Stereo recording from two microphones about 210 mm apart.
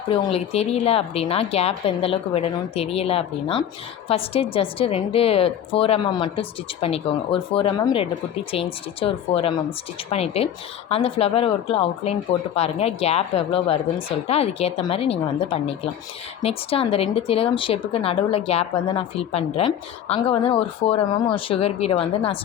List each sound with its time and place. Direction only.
0.1 s a woman's voice: 30° left (ahead or behind)